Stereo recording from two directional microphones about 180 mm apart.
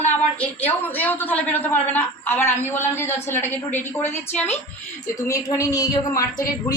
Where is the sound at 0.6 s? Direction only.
10° left (ahead or behind).